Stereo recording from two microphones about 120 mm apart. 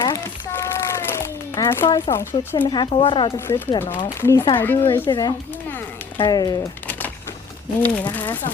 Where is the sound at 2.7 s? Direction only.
40° left (ahead or behind).